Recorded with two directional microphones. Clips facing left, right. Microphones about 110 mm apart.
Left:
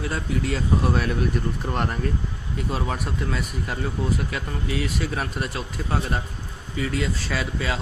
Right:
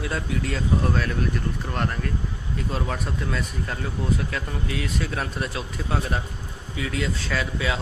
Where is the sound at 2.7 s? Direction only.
5° left (ahead or behind).